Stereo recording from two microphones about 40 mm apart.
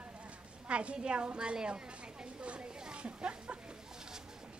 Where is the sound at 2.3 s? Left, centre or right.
Right.